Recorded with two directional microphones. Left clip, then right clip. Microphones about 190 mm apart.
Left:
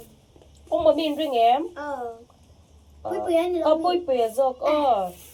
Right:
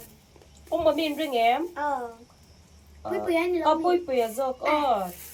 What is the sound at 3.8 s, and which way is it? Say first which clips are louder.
Speech: left 2 dB; 40° left (ahead or behind).